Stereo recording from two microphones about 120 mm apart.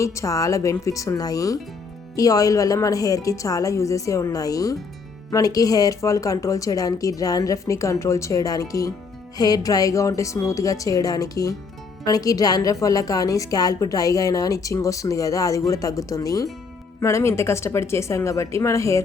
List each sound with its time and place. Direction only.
0.0 s a woman's voice: 25° left (ahead or behind)